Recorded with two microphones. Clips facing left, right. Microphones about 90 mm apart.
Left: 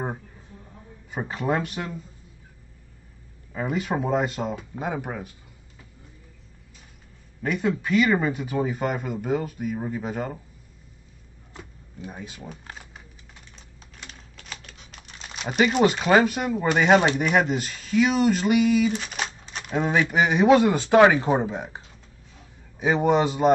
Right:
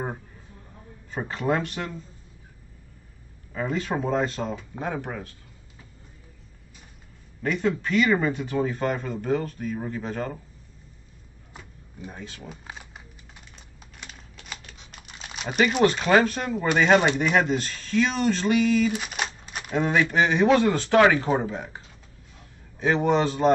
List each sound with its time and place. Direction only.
1.1 s speech: 10° left (ahead or behind)
3.5 s speech: 10° left (ahead or behind)
7.4 s speech: 10° left (ahead or behind)
12.0 s speech: 15° left (ahead or behind)
12.4 s speech: 5° right (ahead or behind)
13.9 s typing: 5° right (ahead or behind)
15.8 s speech: 10° left (ahead or behind)
18.9 s a sound: 5° right (ahead or behind)
20.0 s speech: 15° left (ahead or behind)